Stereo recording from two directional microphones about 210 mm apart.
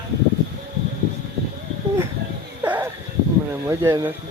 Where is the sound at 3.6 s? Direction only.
15° right (ahead or behind).